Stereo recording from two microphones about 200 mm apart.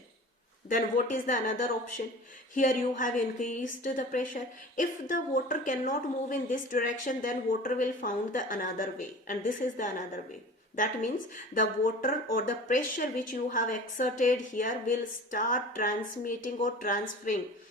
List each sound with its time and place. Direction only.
0.7 s a woman's voice: 40° left (ahead or behind)